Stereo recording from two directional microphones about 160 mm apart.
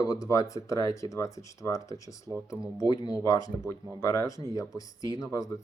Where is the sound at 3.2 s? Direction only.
20° left (ahead or behind).